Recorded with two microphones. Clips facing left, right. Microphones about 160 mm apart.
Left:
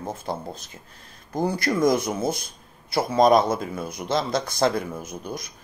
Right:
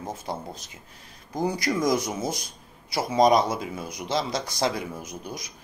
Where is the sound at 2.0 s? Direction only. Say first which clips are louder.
Left 4 dB; 55° left (ahead or behind).